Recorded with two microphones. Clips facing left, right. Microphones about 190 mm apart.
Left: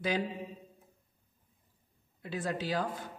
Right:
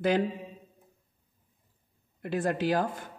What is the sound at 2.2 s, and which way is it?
Speech, 50° right (ahead or behind).